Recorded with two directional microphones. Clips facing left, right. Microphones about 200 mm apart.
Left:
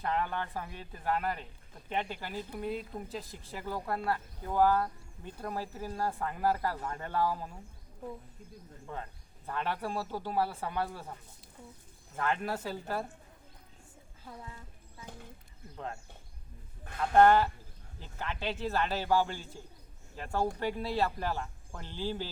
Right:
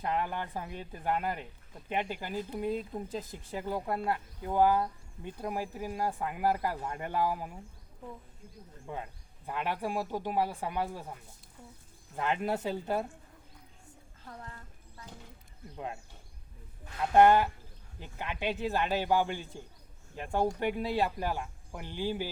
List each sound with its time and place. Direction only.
0.0 s speech: 15° right (ahead or behind)
8.9 s speech: 15° right (ahead or behind)
12.1 s speech: 20° right (ahead or behind)
14.3 s a woman's voice: 10° left (ahead or behind)
17.2 s speech: 15° right (ahead or behind)